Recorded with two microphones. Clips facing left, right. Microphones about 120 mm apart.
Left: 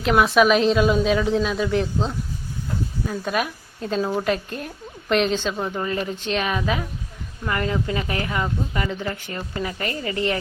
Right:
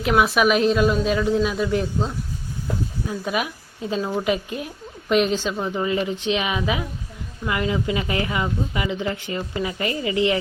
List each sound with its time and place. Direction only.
0.0 s a woman's voice: 5° right (ahead or behind); by 10.0 s 20° right (ahead or behind)